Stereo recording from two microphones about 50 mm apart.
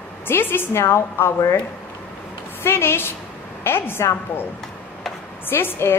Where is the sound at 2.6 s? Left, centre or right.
Left.